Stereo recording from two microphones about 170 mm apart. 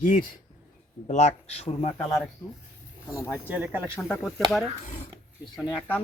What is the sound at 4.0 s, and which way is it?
Speech, 10° left (ahead or behind).